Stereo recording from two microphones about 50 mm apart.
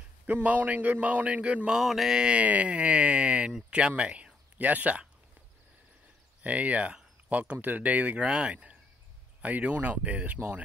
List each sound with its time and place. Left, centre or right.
0.3 s a man's voice: right
1.7 s mantra: centre
2.3 s speech: right
4.6 s a man's voice: right
6.4 s a man's voice: right
8.3 s speech: right